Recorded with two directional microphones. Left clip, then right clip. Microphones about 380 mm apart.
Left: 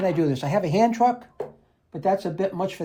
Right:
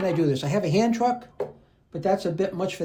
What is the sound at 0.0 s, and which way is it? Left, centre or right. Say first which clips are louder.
Speech: left 1 dB; centre.